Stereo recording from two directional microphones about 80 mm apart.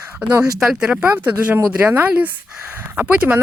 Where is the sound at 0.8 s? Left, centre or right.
Centre.